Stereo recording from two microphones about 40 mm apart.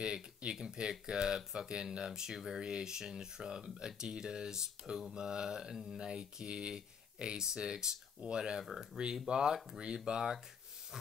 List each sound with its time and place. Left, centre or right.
0.0 s speech: right